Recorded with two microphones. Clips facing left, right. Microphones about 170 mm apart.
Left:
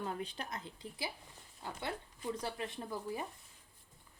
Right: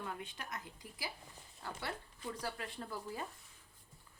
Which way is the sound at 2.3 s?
20° left (ahead or behind).